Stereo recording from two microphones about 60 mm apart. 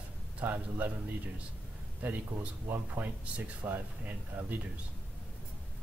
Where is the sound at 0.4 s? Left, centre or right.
Right.